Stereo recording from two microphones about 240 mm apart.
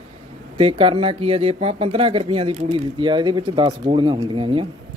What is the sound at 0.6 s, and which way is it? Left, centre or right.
Speech, right.